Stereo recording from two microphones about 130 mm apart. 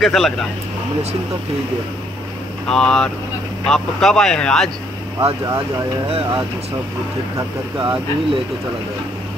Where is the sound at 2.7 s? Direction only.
5° left (ahead or behind).